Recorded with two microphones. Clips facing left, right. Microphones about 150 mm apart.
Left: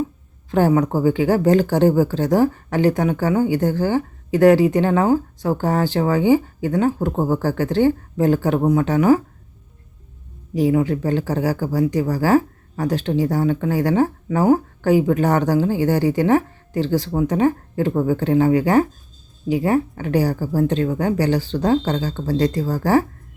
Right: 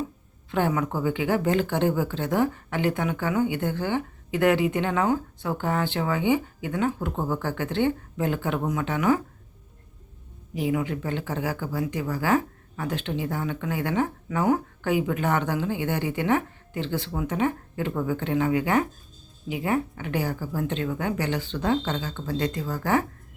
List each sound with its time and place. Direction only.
0.5 s speech: 40° left (ahead or behind)
10.5 s speech: 35° left (ahead or behind)